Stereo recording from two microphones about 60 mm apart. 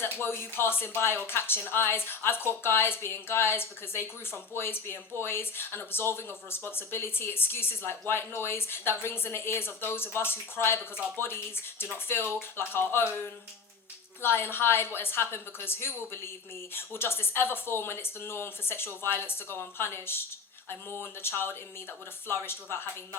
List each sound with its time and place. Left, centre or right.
0.0 s speech: left